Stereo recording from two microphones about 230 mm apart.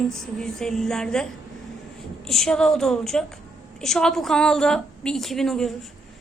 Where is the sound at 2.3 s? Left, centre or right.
Centre.